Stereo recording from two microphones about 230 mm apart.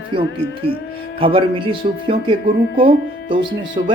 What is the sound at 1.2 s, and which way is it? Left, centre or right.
Speech, right.